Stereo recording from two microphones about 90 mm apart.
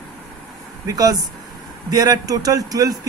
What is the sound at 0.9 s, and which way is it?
Speech, 45° right (ahead or behind).